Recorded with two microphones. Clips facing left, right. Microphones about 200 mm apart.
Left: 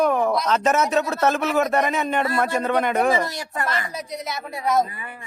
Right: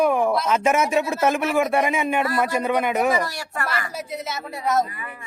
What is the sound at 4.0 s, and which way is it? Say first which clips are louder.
Speech: even; 5° right (ahead or behind).